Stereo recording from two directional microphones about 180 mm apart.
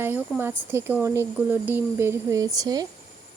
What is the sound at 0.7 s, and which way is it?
Speech, 10° right (ahead or behind).